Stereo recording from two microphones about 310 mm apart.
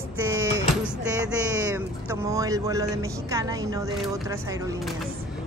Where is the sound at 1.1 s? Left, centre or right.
Centre.